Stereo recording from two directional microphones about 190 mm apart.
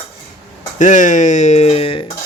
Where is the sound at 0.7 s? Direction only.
40° left (ahead or behind).